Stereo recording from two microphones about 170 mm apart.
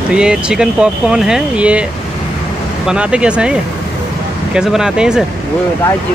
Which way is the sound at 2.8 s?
5° right (ahead or behind).